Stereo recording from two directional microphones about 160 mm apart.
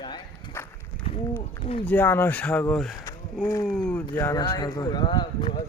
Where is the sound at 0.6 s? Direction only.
15° left (ahead or behind).